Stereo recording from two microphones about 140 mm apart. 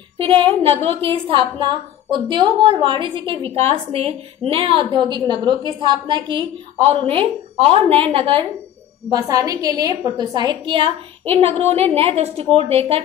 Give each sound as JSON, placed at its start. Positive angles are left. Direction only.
{"t": 0.2, "sound": "a woman's voice", "side_deg": -40}
{"t": 9.1, "sound": "a woman's voice", "side_deg": -25}